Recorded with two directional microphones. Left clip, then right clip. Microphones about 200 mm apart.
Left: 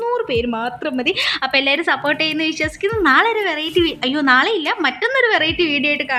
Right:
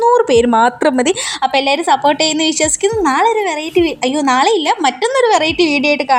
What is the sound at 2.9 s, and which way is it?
A woman's voice, 5° right (ahead or behind).